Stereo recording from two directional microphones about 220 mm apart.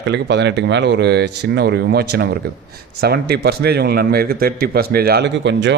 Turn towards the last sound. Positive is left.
turn(degrees=-55)  # may be behind; listen again after turning